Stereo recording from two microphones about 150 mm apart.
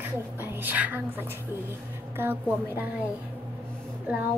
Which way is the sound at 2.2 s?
15° right (ahead or behind).